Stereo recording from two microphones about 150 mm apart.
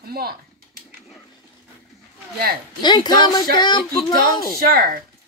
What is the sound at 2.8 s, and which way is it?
Speech, 30° left (ahead or behind).